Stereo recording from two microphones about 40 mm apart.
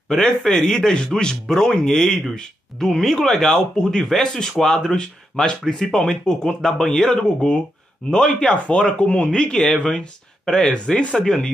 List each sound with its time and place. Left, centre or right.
0.1 s speech: centre
0.9 s speech: centre
4.9 s speech: left
5.7 s speech: centre; by 9.3 s left
9.3 s speech: centre